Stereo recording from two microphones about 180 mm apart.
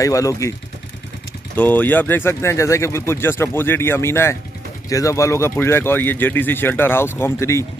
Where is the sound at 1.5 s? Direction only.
10° left (ahead or behind).